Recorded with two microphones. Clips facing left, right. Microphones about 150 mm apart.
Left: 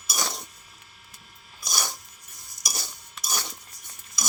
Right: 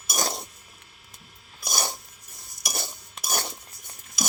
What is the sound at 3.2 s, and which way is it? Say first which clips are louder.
Dishes: right 3 dB; 50° right (ahead or behind).